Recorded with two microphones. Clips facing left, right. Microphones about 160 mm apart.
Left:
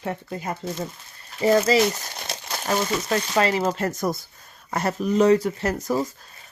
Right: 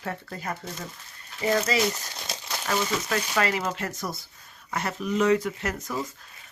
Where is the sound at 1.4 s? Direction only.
30° left (ahead or behind).